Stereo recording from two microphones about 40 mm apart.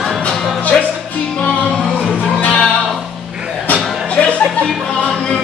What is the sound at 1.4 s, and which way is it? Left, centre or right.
Music, left.